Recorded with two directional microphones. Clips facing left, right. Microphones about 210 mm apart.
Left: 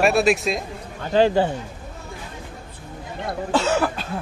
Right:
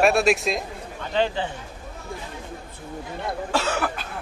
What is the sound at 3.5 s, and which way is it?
Cough, 25° left (ahead or behind).